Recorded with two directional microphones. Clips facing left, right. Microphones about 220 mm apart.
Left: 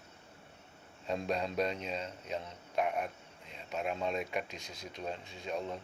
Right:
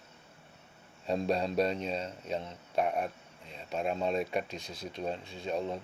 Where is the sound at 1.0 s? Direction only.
35° right (ahead or behind).